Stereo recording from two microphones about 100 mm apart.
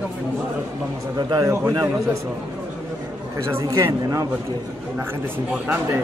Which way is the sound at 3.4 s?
30° right (ahead or behind).